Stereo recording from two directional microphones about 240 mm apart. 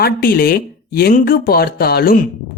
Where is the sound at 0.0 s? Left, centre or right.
Left.